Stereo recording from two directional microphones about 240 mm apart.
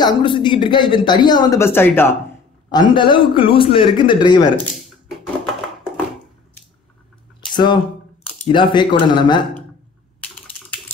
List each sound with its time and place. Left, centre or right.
0.0 s speech: centre
2.7 s speech: centre
7.5 s speech: centre
10.2 s typing: centre